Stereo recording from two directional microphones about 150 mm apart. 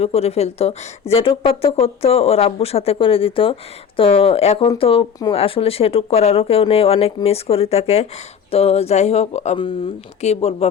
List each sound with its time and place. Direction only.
0.0 s a woman's voice: 45° left (ahead or behind)